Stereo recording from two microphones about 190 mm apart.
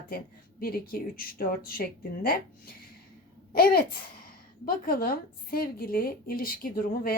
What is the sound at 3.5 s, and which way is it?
Speech, 50° left (ahead or behind).